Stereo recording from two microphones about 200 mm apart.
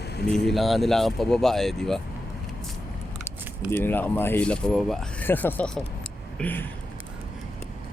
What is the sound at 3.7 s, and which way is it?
Speech, 10° left (ahead or behind).